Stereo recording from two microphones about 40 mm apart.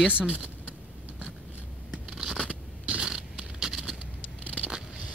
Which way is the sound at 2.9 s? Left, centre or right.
Right.